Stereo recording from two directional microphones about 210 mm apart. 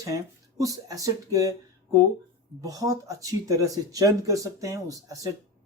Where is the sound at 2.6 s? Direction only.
15° right (ahead or behind).